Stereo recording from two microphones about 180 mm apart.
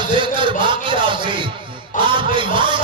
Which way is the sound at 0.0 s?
25° right (ahead or behind).